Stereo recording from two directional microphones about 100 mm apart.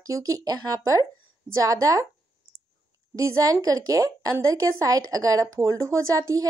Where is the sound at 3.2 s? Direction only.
30° right (ahead or behind).